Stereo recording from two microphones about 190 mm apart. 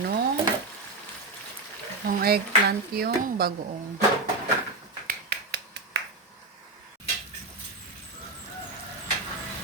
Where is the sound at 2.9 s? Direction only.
55° right (ahead or behind).